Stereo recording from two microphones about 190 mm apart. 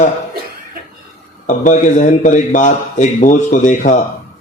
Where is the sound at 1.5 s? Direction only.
40° left (ahead or behind).